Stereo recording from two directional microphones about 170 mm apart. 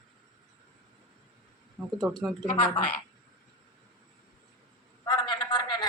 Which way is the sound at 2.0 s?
Centre (ahead or behind).